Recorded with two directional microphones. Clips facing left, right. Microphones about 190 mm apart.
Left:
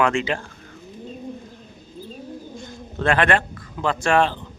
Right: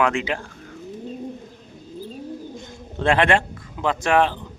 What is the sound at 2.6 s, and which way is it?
Bird, 25° right (ahead or behind).